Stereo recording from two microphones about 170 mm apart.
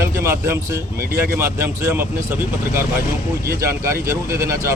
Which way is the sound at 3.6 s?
15° right (ahead or behind).